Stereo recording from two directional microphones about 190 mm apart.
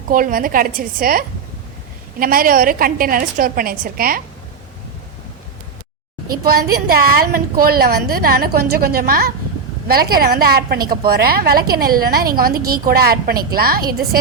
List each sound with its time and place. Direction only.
0.1 s a woman's voice: 45° right (ahead or behind)
6.2 s a woman's voice: 50° right (ahead or behind)